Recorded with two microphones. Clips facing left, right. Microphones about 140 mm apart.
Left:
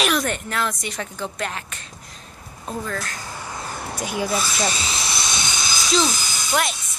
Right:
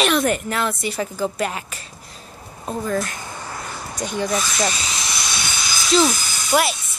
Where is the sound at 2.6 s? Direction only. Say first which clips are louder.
Right 5 dB; 15° right (ahead or behind).